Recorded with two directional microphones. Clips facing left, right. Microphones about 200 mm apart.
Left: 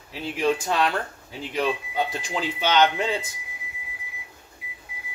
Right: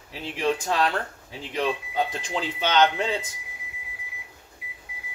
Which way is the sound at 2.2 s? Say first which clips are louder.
Left 1 dB; 10° left (ahead or behind).